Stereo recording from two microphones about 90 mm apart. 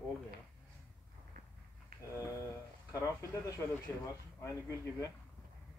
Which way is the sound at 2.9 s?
40° left (ahead or behind).